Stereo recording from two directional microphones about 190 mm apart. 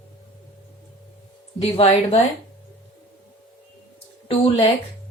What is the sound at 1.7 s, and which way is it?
Speech, 30° left (ahead or behind).